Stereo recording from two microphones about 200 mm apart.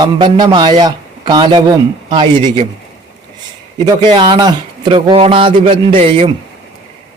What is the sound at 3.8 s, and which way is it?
Speech, 25° right (ahead or behind).